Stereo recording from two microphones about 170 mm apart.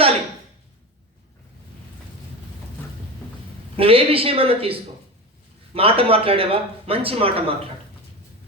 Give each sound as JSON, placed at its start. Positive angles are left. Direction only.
{"t": 3.8, "sound": "speech", "side_deg": -35}